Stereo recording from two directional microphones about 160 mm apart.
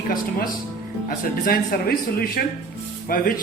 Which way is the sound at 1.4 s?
65° left (ahead or behind).